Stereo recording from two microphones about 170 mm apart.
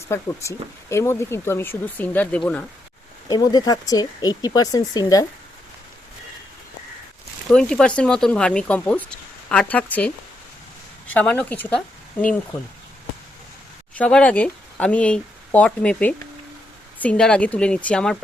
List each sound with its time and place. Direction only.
0.1 s speech: 15° left (ahead or behind)
3.2 s speech: 25° left (ahead or behind)
7.5 s speech: 5° left (ahead or behind)
11.1 s speech: 10° left (ahead or behind)
14.0 s speech: 5° left (ahead or behind)